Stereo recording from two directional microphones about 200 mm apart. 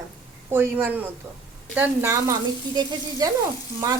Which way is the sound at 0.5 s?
10° right (ahead or behind).